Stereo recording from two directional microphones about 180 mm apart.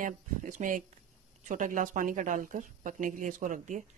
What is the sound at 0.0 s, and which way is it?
Speech, 45° right (ahead or behind).